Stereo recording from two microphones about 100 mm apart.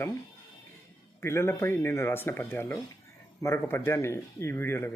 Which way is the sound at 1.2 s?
25° left (ahead or behind).